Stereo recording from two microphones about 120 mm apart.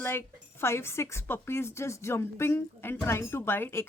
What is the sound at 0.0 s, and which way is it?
Speech, 20° left (ahead or behind).